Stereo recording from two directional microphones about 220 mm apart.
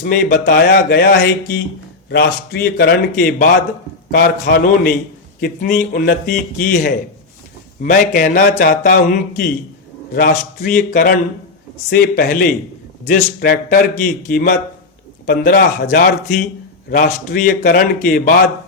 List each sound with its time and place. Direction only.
0.0 s a man's voice: 40° left (ahead or behind)
10.2 s a man's voice: 45° left (ahead or behind)